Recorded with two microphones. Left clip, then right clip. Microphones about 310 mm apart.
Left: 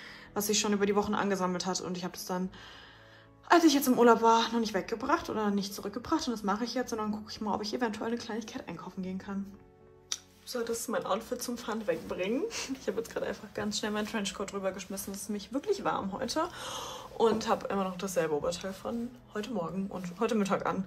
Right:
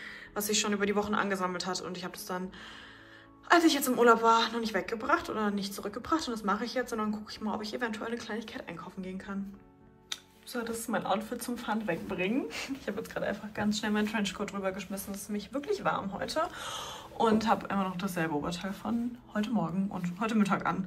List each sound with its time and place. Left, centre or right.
0.3 s speech: centre
3.4 s speech: centre